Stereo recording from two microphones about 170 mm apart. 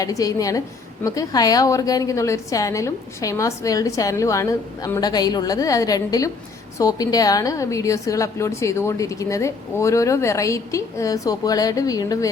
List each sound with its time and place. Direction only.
0.0 s a woman's voice: 20° left (ahead or behind)